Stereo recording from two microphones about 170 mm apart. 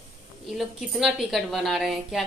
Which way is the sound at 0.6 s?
Centre (ahead or behind).